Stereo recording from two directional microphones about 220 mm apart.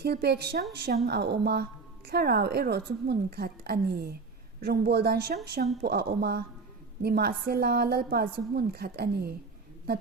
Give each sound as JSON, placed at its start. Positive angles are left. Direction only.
{"t": 0.0, "sound": "a woman's voice", "side_deg": -45}